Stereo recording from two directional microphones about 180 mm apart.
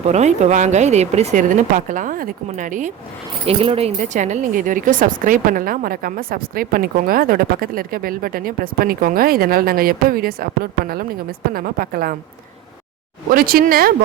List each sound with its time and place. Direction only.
0.0 s speech: 40° right (ahead or behind)
3.4 s speech: 30° right (ahead or behind); by 12.1 s 55° right (ahead or behind)
13.3 s speech: 55° right (ahead or behind)